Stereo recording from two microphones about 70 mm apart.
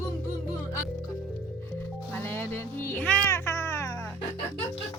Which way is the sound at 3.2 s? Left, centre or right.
Left.